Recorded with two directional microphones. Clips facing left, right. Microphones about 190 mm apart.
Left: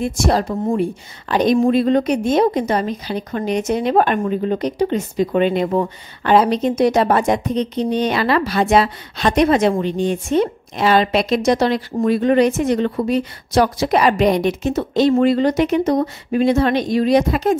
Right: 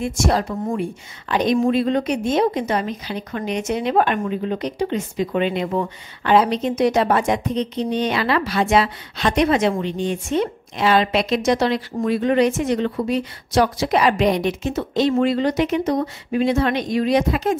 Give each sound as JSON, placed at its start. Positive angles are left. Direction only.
{"t": 0.0, "sound": "a woman's voice", "side_deg": 35}